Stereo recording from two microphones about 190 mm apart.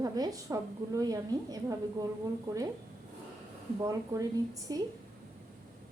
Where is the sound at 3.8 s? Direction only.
20° right (ahead or behind).